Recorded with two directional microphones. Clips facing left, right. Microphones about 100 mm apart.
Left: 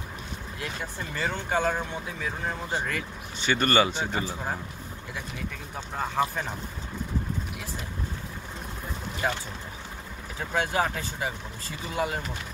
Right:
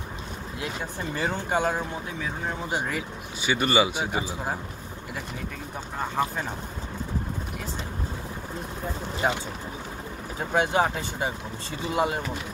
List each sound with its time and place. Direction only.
0.6 s speech: 15° right (ahead or behind)
5.9 s speech: 5° right (ahead or behind)
9.2 s speech: 25° right (ahead or behind)
10.5 s speech: 20° right (ahead or behind)